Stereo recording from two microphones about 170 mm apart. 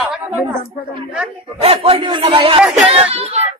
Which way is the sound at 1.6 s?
35° right (ahead or behind).